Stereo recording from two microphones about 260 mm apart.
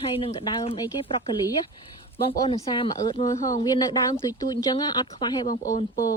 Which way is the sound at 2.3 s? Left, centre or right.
Centre.